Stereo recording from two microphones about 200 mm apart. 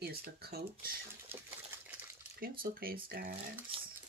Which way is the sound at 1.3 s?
10° right (ahead or behind).